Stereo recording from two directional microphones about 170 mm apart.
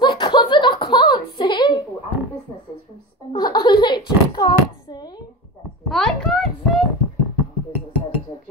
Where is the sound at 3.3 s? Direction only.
25° left (ahead or behind).